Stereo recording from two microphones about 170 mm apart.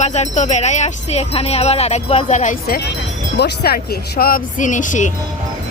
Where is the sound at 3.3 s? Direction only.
75° left (ahead or behind).